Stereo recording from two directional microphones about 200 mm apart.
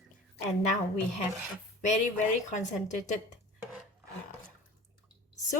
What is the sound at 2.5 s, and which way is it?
Speech, 35° left (ahead or behind).